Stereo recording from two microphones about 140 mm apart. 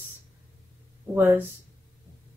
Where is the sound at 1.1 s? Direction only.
15° right (ahead or behind).